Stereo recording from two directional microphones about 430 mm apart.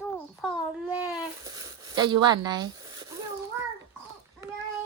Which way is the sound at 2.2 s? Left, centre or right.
Centre.